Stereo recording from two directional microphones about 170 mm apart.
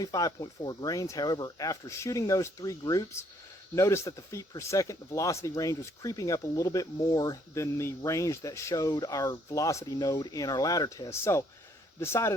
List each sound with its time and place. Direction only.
0.0 s speech: 20° left (ahead or behind)